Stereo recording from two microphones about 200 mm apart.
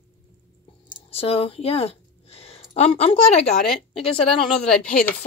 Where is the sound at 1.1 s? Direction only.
30° left (ahead or behind).